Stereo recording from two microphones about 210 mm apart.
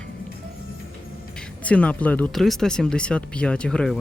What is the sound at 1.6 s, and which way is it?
Speech, 5° left (ahead or behind).